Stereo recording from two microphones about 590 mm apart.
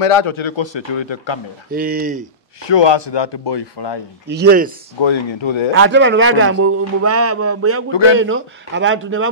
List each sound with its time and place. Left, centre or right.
0.0 s a man's voice: left
1.7 s speech: centre
2.6 s a man's voice: left
4.3 s speech: centre
5.0 s a man's voice: left
5.7 s a man's voice: centre
7.9 s a man's voice: left
8.2 s a man's voice: centre